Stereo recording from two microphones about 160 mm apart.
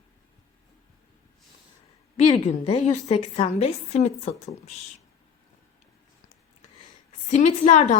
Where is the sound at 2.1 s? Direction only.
45° left (ahead or behind).